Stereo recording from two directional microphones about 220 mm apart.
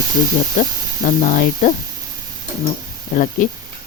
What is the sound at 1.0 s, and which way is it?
Speech, 40° left (ahead or behind).